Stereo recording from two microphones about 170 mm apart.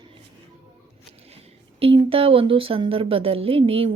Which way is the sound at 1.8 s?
35° right (ahead or behind).